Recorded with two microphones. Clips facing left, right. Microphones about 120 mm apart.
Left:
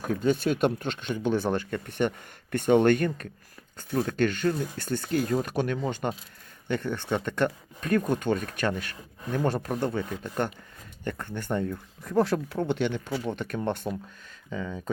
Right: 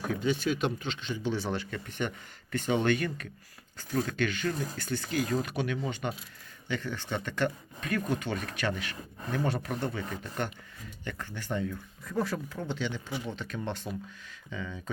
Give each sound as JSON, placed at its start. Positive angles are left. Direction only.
{"t": 0.1, "sound": "speech", "side_deg": 45}
{"t": 3.9, "sound": "speech", "side_deg": 35}
{"t": 12.1, "sound": "speech", "side_deg": 75}
{"t": 14.5, "sound": "speech", "side_deg": 40}